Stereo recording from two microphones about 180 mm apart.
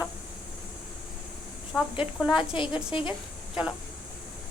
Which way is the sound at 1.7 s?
Centre (ahead or behind).